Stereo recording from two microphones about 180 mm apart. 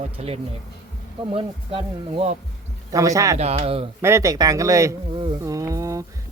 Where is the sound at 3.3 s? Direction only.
35° right (ahead or behind).